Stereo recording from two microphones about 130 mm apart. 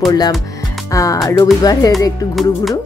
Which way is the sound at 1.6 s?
30° left (ahead or behind).